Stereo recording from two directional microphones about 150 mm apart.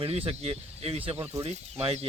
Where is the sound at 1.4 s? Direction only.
45° right (ahead or behind).